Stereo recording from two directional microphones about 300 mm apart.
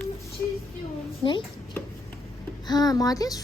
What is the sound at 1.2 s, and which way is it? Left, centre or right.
Speech, centre.